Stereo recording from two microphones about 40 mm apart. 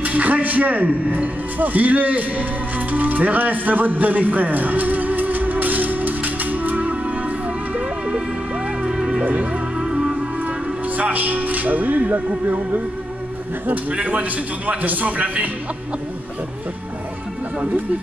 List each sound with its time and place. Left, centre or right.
0.0 s a man's voice: right
2.9 s music: right
8.8 s music: centre
9.2 s speech: right
9.8 s music: right
11.0 s a man's voice: right
13.9 s a man's voice: right